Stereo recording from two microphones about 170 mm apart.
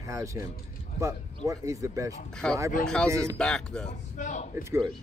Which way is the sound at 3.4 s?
5° left (ahead or behind).